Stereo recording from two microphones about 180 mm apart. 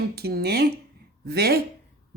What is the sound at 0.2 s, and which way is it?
A woman's voice, 60° right (ahead or behind).